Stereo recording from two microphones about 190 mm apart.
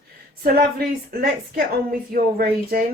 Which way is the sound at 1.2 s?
50° right (ahead or behind).